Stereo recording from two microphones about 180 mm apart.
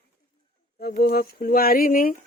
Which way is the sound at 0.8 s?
60° left (ahead or behind).